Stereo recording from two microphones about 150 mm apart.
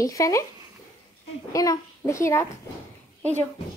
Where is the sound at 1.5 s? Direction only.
20° left (ahead or behind).